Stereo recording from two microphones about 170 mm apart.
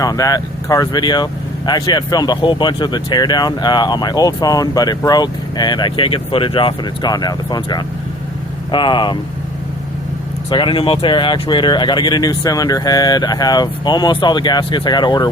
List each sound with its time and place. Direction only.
0.0 s speech: 20° left (ahead or behind)
10.5 s speech: 30° left (ahead or behind)